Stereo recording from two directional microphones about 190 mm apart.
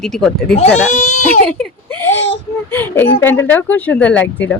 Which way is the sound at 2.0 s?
10° left (ahead or behind).